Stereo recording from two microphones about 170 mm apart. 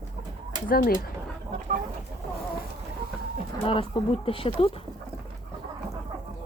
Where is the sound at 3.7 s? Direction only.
30° left (ahead or behind).